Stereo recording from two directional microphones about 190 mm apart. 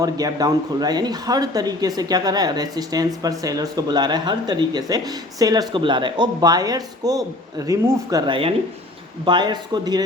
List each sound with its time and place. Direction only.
0.0 s speech: 20° right (ahead or behind)